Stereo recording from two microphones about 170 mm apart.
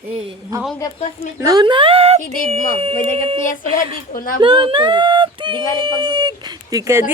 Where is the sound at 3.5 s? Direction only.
50° left (ahead or behind).